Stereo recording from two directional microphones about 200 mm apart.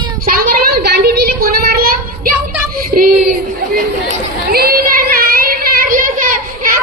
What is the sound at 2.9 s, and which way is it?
Child singing, 45° right (ahead or behind).